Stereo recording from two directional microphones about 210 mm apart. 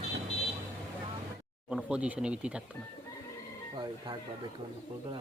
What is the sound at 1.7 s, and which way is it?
Speech, 5° right (ahead or behind).